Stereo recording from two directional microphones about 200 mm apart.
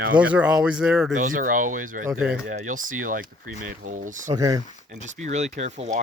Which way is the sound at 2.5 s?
40° right (ahead or behind).